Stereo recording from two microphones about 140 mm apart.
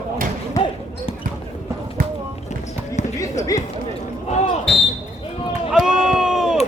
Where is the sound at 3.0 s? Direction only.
60° left (ahead or behind).